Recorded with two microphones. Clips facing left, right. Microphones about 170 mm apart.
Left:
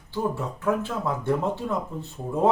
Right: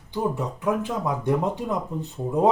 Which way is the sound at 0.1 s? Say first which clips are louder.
Right 2 dB; 15° right (ahead or behind).